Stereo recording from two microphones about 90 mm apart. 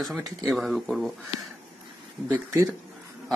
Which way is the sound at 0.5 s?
Centre (ahead or behind).